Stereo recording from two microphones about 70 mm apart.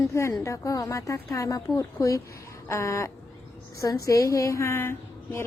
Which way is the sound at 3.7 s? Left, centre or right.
Left.